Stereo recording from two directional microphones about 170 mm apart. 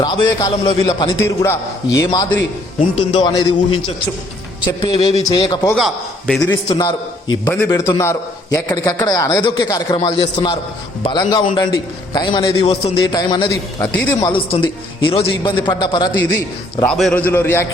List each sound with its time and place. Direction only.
0.0 s a man's voice: 20° left (ahead or behind)
2.9 s a man's voice: 35° left (ahead or behind)
4.6 s a man's voice: 25° left (ahead or behind)
5.7 s a man's voice: centre (ahead or behind)
6.7 s a man's voice: 25° left (ahead or behind)
13.1 s a man's voice: 25° left (ahead or behind)
16.9 s a man's voice: 5° left (ahead or behind)